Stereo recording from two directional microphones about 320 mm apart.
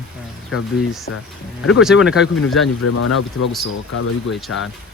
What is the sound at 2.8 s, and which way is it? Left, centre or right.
Speech, left.